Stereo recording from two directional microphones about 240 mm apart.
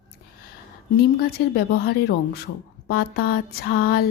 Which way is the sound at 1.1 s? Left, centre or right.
Left.